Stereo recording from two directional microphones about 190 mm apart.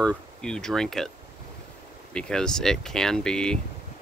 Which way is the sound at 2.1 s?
5° left (ahead or behind).